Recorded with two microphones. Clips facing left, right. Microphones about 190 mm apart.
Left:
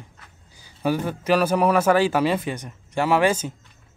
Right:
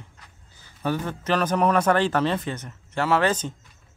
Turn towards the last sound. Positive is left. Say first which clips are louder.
# left 2 dB
turn(degrees=10)  # may be behind; listen again after turning